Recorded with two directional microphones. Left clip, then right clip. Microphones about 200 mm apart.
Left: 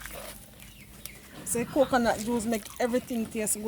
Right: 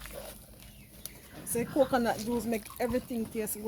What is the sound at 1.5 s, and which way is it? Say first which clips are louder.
Speech: left 3 dB; 40° left (ahead or behind).